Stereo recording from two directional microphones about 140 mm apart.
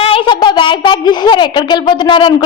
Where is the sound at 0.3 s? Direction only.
35° left (ahead or behind).